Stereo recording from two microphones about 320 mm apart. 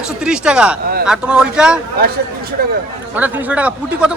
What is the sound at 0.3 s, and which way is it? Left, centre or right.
Speech, centre.